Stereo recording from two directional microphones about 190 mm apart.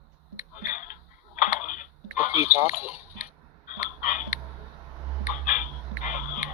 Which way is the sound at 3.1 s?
45° left (ahead or behind).